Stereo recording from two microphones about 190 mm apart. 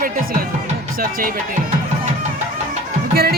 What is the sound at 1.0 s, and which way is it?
Speech, 50° right (ahead or behind).